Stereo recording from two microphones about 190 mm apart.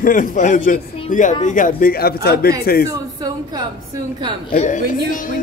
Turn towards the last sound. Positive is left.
turn(degrees=40)  # may be behind; listen again after turning